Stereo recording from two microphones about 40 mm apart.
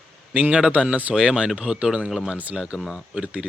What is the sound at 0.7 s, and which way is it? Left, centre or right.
Speech, right.